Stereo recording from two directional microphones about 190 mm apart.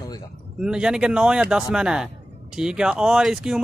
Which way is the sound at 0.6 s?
5° right (ahead or behind).